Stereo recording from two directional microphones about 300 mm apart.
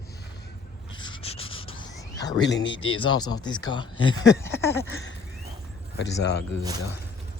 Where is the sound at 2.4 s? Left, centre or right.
Left.